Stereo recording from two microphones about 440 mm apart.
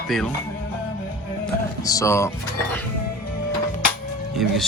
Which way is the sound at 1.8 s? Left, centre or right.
Centre.